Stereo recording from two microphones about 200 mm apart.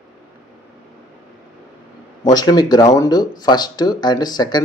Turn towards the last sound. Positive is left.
turn(degrees=20)  # may be behind; listen again after turning